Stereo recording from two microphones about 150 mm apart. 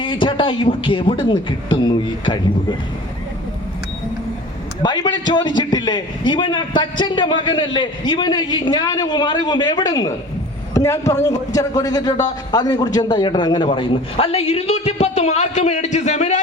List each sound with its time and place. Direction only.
0.0 s a man's voice: 35° left (ahead or behind)
4.8 s a man's voice: 30° left (ahead or behind); by 16.4 s 50° left (ahead or behind)